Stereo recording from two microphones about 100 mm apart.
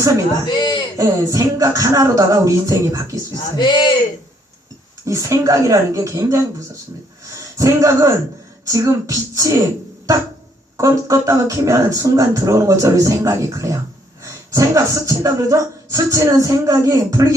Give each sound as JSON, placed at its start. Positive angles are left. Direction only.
{"t": 0.4, "sound": "a sound", "side_deg": 50}
{"t": 0.9, "sound": "speech", "side_deg": -35}
{"t": 3.3, "sound": "speech", "side_deg": 45}
{"t": 5.0, "sound": "speech", "side_deg": -30}
{"t": 10.8, "sound": "speech", "side_deg": -30}